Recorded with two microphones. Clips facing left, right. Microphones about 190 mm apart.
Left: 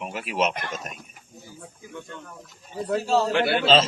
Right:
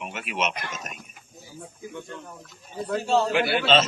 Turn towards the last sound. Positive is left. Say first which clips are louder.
# left 2 dB
turn(degrees=30)  # may be behind; listen again after turning